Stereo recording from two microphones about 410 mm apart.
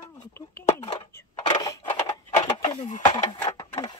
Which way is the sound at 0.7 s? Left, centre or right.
Centre.